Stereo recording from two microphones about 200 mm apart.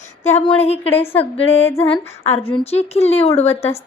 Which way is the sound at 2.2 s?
30° left (ahead or behind).